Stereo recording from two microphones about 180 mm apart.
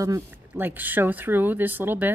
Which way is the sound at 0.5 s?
10° right (ahead or behind).